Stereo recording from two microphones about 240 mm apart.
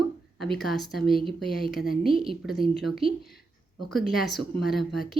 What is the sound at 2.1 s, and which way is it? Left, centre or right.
Speech, right.